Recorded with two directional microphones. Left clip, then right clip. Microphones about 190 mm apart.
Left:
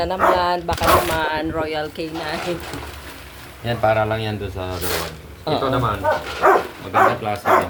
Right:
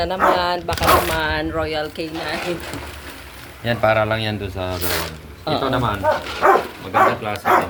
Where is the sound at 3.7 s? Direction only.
10° right (ahead or behind).